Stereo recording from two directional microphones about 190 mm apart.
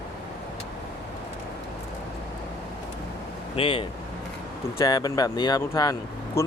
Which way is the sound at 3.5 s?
30° left (ahead or behind).